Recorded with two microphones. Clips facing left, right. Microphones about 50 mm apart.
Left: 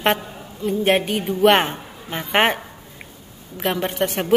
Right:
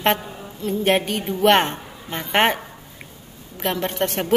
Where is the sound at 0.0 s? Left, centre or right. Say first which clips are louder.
Even; centre.